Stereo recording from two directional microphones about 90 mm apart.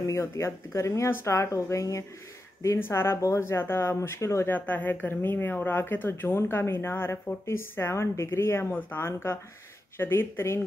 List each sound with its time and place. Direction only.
0.0 s speech: 30° left (ahead or behind)
4.5 s speech: 20° left (ahead or behind)